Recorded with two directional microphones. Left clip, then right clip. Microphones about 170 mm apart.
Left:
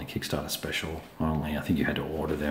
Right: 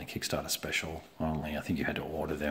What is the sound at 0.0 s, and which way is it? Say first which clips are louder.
Speech: left 2 dB; 35° right (ahead or behind).